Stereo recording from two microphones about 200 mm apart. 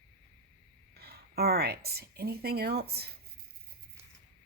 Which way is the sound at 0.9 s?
50° right (ahead or behind).